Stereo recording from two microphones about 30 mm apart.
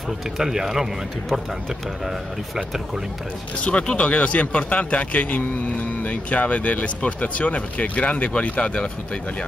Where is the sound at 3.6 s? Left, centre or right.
Left.